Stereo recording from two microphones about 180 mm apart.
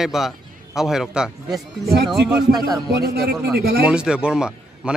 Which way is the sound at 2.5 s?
20° right (ahead or behind).